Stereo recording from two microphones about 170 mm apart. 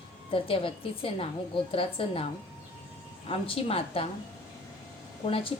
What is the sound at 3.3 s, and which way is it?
Speech, 35° left (ahead or behind).